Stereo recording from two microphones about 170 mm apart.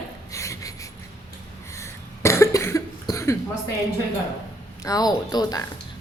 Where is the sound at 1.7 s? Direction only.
15° left (ahead or behind).